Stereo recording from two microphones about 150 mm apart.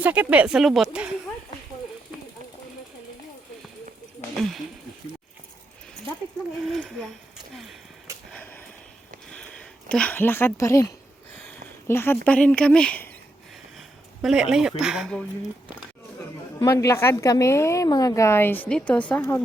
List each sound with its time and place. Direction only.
0.0 s speech: 10° right (ahead or behind)
6.7 s speech: centre (ahead or behind)
8.3 s a sound: 10° left (ahead or behind)
9.3 s speech: 5° left (ahead or behind)
13.7 s speech: 5° right (ahead or behind)
16.6 s a woman's voice: 20° left (ahead or behind)